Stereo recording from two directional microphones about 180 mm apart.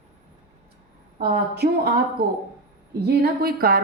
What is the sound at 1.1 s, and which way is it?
A woman's voice, 55° right (ahead or behind).